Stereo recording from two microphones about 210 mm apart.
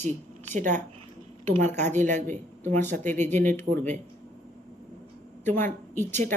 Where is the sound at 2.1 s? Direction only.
10° left (ahead or behind).